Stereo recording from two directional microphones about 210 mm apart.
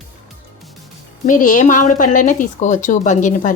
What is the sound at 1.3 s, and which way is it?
Speech, 40° left (ahead or behind).